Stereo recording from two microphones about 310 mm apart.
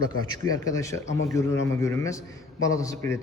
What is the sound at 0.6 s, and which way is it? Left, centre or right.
A man's voice, centre.